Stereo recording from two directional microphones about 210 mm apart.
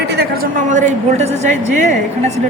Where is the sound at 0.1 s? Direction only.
55° right (ahead or behind).